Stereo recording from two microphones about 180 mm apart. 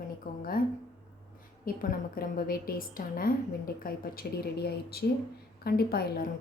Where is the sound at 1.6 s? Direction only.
55° left (ahead or behind).